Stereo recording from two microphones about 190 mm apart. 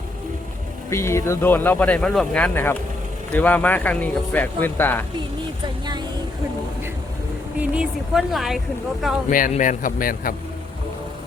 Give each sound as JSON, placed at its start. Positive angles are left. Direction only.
{"t": 0.9, "sound": "speech", "side_deg": 15}
{"t": 7.6, "sound": "speech", "side_deg": -5}
{"t": 9.5, "sound": "a man's voice", "side_deg": 40}